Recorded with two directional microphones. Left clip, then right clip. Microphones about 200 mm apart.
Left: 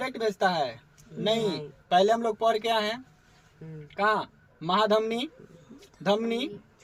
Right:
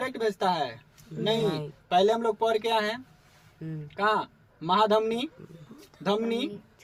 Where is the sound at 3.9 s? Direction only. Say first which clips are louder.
Even; 20° left (ahead or behind).